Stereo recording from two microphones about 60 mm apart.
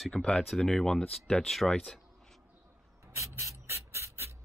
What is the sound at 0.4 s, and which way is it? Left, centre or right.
Speech, centre.